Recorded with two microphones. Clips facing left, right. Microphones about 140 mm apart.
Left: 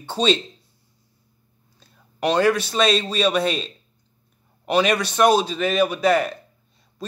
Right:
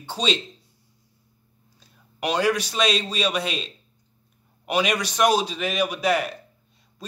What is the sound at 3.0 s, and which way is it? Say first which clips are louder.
Speech: left 5 dB; 10° right (ahead or behind).